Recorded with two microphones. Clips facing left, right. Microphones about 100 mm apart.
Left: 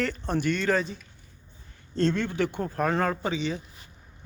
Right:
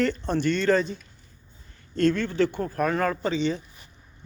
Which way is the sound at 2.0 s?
20° left (ahead or behind).